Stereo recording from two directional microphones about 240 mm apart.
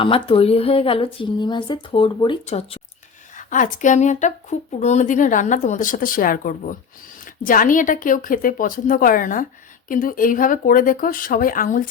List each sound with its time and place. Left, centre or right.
0.0 s a woman's voice: left